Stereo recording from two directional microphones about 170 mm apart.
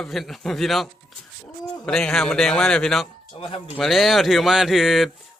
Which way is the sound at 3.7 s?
Centre (ahead or behind).